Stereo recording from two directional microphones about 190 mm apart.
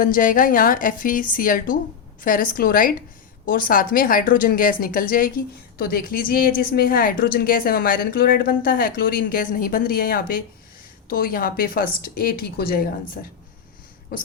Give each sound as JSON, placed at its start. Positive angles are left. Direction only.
{"t": 0.0, "sound": "a woman's voice", "side_deg": 45}
{"t": 14.1, "sound": "a woman's voice", "side_deg": 50}